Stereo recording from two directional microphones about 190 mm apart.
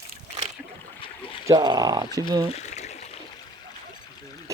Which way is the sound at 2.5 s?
35° left (ahead or behind).